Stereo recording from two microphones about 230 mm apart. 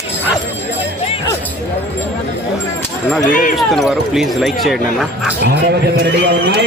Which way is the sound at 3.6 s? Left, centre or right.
Centre.